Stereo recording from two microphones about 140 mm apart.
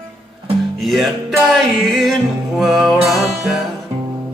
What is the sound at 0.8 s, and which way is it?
Music, centre (ahead or behind).